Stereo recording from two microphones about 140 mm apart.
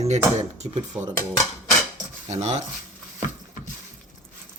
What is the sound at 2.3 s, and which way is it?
Speech, 50° right (ahead or behind).